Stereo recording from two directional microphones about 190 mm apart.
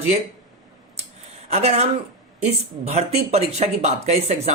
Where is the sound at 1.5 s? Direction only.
35° right (ahead or behind).